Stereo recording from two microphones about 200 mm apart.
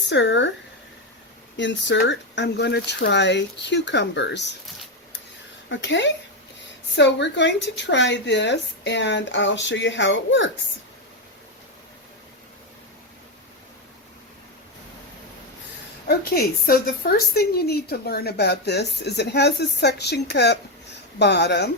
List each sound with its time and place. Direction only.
0.1 s speech: 60° left (ahead or behind)
1.5 s speech: 65° left (ahead or behind)
5.6 s speech: 65° left (ahead or behind)
16.0 s speech: 50° left (ahead or behind)